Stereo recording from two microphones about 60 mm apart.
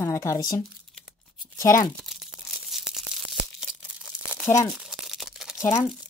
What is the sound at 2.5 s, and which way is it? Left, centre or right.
Tearing, centre.